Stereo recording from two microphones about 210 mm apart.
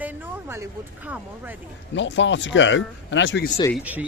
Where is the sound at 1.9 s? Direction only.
60° left (ahead or behind).